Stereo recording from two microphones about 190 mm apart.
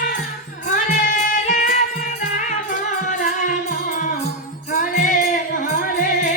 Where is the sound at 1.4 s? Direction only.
40° left (ahead or behind).